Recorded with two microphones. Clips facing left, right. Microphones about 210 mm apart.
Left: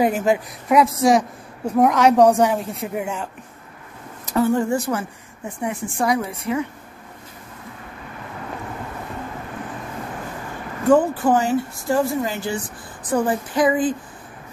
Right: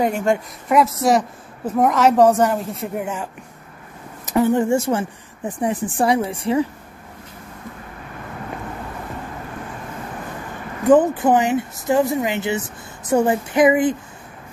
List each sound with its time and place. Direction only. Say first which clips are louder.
0.0 s speech: left 1 dB; 5° left (ahead or behind)
4.3 s speech: right 2 dB; 20° right (ahead or behind)
10.9 s speech: right 2 dB; 20° right (ahead or behind)